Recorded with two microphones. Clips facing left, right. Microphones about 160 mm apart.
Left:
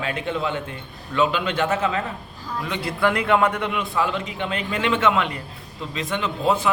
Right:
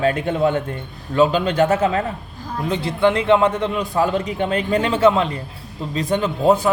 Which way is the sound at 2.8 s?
25° right (ahead or behind).